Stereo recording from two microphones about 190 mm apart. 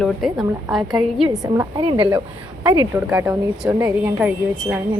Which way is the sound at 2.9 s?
10° right (ahead or behind).